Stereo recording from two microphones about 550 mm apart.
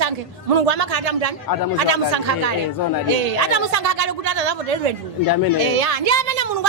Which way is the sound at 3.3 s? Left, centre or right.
Right.